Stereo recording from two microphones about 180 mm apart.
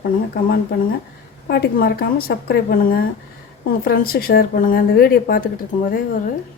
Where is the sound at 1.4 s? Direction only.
60° left (ahead or behind).